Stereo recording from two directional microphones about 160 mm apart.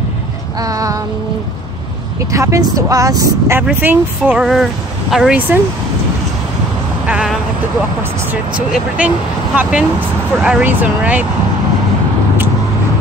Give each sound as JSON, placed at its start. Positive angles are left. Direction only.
{"t": 0.6, "sound": "child singing", "side_deg": -20}
{"t": 2.3, "sound": "speech", "side_deg": -20}
{"t": 7.1, "sound": "speech", "side_deg": -5}